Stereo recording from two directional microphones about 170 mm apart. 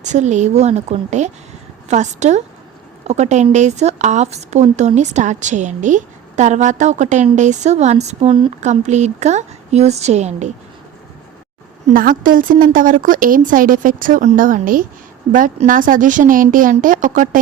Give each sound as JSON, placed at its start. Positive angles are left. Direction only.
{"t": 0.0, "sound": "a woman's voice", "side_deg": -45}
{"t": 8.6, "sound": "a woman's voice", "side_deg": -45}
{"t": 11.9, "sound": "a woman's voice", "side_deg": -55}